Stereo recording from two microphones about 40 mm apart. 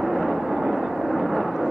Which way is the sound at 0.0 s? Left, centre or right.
Centre.